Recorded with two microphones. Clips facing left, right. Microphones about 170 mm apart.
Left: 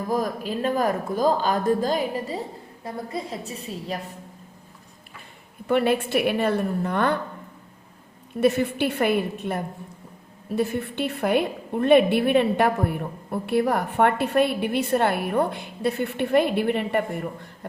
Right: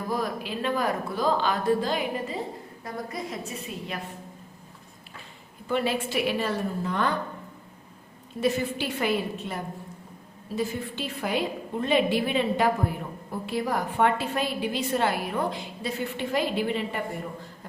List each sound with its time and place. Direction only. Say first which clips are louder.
0.1 s a woman's voice: left 4 dB; 45° left (ahead or behind)
5.6 s a woman's voice: left 5 dB; 60° left (ahead or behind)
8.4 s a woman's voice: left 5 dB; 60° left (ahead or behind)